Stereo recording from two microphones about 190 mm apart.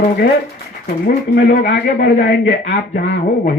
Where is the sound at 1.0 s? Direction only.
60° left (ahead or behind).